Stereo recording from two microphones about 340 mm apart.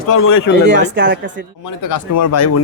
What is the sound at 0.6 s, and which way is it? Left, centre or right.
Speech, right.